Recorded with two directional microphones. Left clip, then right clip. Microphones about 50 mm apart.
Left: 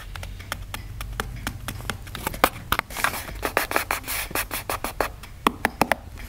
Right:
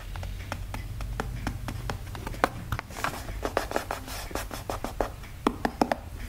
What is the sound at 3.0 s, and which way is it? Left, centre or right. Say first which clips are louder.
Scratch: left 6 dB; left.